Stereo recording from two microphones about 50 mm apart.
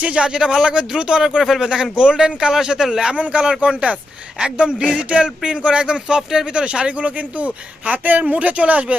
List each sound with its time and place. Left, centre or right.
0.0 s speech: centre
3.1 s speech: right